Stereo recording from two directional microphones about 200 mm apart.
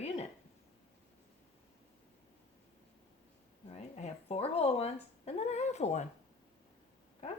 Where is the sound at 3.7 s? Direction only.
30° left (ahead or behind).